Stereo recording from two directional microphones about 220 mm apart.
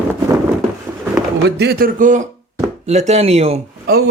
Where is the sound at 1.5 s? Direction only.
50° right (ahead or behind); by 3.6 s 30° right (ahead or behind).